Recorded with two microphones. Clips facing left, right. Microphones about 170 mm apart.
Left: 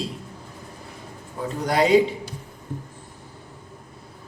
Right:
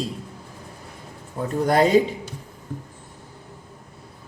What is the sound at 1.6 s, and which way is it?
Speech, 45° right (ahead or behind).